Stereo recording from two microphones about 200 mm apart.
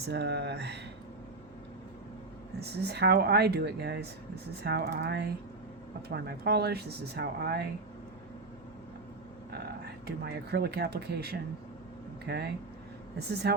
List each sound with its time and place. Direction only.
0.0 s speech: 55° right (ahead or behind)
2.6 s speech: 55° right (ahead or behind)
10.1 s speech: 55° right (ahead or behind)